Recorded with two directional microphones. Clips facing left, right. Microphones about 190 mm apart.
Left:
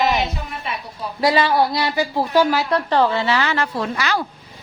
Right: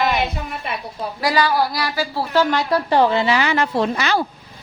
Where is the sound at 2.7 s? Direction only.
10° right (ahead or behind).